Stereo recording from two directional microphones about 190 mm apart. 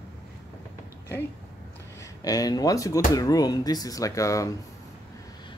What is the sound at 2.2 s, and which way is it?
Speech, 20° left (ahead or behind).